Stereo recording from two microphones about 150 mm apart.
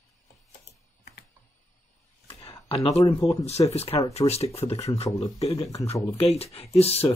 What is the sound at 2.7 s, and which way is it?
Speech, 40° left (ahead or behind).